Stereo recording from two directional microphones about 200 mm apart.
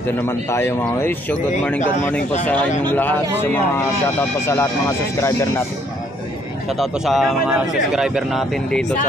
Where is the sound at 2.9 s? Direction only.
10° left (ahead or behind).